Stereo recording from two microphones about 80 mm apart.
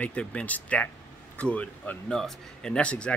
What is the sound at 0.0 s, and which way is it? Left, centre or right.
Speech, centre.